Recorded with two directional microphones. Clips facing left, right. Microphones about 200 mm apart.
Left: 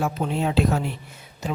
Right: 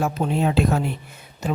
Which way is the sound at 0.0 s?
50° right (ahead or behind).